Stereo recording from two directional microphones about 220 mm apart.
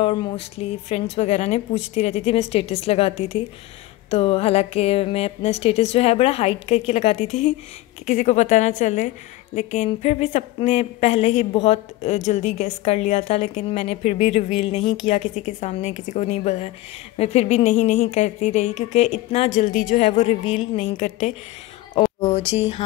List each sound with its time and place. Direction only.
0.0 s a woman's voice: 20° left (ahead or behind)
22.3 s a woman's voice: 30° left (ahead or behind)